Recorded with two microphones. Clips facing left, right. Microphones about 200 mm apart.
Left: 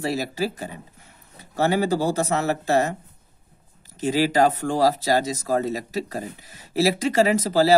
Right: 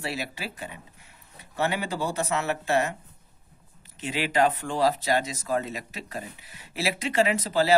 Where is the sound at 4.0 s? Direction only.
40° left (ahead or behind).